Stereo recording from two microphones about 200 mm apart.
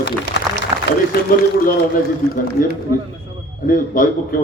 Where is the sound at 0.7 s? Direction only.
30° right (ahead or behind).